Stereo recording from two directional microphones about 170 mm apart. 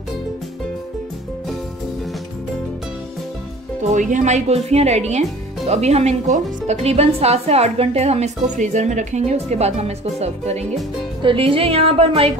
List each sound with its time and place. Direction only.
3.8 s a woman's voice: 45° right (ahead or behind)